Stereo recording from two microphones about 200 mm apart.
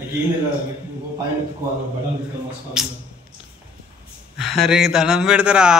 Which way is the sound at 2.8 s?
Centre (ahead or behind).